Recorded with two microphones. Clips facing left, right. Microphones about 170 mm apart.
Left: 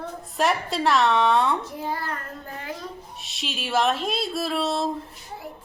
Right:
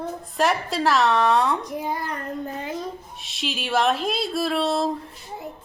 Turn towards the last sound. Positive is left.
turn(degrees=0)  # may be behind; listen again after turning